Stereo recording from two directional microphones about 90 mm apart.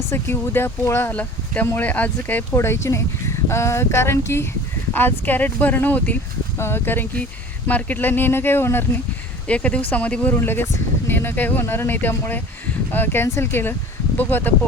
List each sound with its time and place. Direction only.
0.1 s speech: 25° left (ahead or behind)
1.1 s speech: 15° left (ahead or behind)
9.5 s speech: 15° left (ahead or behind)
10.3 s speech: 25° left (ahead or behind)